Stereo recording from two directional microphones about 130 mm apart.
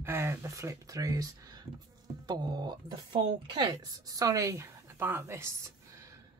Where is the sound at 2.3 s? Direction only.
30° right (ahead or behind).